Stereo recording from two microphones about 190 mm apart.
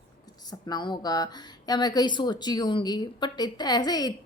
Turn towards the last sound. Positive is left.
turn(degrees=20)  # may be behind; listen again after turning